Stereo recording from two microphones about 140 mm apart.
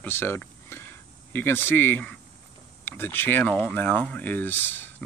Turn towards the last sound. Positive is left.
turn(degrees=15)  # may be behind; listen again after turning